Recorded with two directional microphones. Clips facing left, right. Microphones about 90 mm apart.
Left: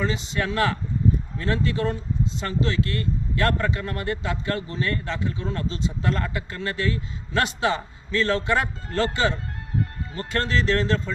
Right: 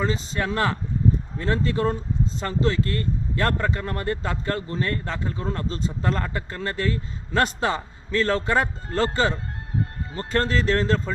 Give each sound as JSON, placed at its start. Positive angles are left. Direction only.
{"t": 0.0, "sound": "speech", "side_deg": -35}